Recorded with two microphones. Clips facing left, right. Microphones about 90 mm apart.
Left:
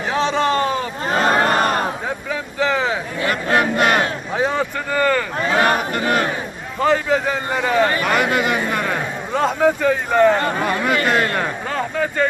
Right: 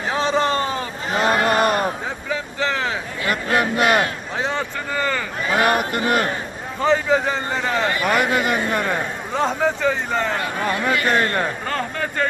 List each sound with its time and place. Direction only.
0.2 s a sound: centre (ahead or behind)
1.0 s speech: 40° left (ahead or behind)
1.5 s a sound: 40° left (ahead or behind)
2.3 s vehicle: 10° left (ahead or behind)
3.2 s a sound: 35° left (ahead or behind)
3.8 s speech: 40° left (ahead or behind)
4.4 s speech: 10° left (ahead or behind)
4.9 s speech: 5° right (ahead or behind)
5.5 s speech: 35° left (ahead or behind)
6.8 s speech: centre (ahead or behind)